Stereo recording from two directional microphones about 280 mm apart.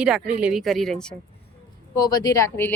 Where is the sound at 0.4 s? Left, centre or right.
Centre.